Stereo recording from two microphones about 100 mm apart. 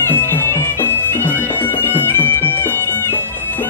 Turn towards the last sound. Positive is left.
turn(degrees=20)  # may be behind; listen again after turning